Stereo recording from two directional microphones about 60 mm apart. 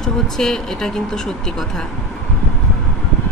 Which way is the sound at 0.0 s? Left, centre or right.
Centre.